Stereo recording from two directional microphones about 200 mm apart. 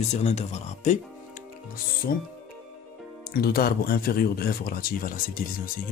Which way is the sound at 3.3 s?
50° left (ahead or behind).